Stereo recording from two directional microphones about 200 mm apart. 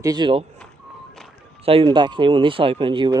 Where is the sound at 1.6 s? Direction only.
30° right (ahead or behind).